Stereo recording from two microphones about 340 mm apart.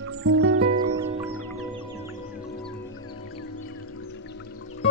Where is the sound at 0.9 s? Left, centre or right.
Centre.